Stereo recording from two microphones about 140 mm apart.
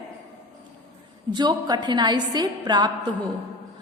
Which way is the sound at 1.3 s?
30° right (ahead or behind).